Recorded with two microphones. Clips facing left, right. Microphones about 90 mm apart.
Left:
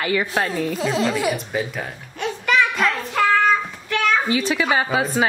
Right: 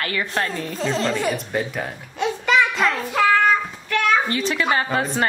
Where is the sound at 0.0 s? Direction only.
15° left (ahead or behind).